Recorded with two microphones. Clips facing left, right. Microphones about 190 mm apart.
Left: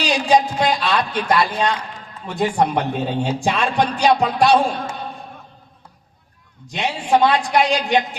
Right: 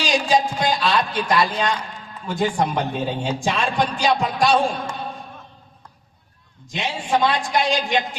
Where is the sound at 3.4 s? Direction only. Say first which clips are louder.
Left 2 dB; 65° left (ahead or behind).